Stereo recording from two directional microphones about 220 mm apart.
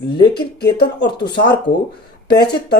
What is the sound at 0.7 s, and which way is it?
A woman's voice, 50° left (ahead or behind).